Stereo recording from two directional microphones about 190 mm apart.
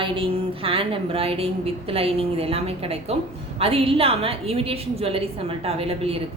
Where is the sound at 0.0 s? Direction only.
30° right (ahead or behind).